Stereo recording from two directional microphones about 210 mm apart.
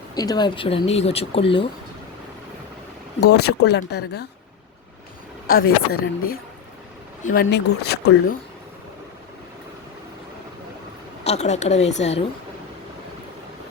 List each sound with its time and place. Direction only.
0.1 s speech: 20° left (ahead or behind)
3.2 s speech: 50° left (ahead or behind)
5.5 s speech: 45° left (ahead or behind)
7.4 s speech: 55° left (ahead or behind)
11.2 s a woman's voice: 30° left (ahead or behind)